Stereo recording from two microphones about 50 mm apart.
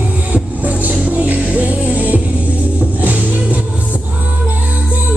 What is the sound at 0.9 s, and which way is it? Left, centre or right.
Music, right.